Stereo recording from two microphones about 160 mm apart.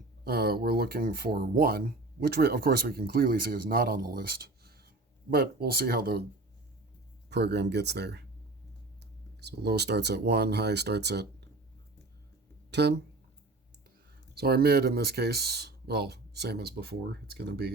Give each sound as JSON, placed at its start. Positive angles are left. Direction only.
{"t": 0.3, "sound": "speech", "side_deg": -75}
{"t": 7.3, "sound": "speech", "side_deg": -90}
{"t": 9.4, "sound": "speech", "side_deg": -90}
{"t": 14.3, "sound": "speech", "side_deg": -80}